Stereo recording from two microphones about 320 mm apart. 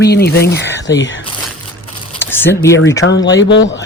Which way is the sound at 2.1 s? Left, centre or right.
Centre.